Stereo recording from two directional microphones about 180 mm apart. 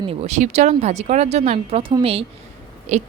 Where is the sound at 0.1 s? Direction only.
35° right (ahead or behind).